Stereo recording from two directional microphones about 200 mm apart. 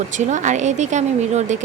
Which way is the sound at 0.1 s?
40° right (ahead or behind).